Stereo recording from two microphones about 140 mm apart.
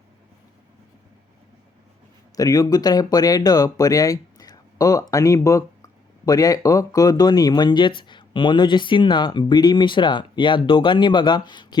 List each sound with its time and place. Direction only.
2.3 s speech: 25° left (ahead or behind)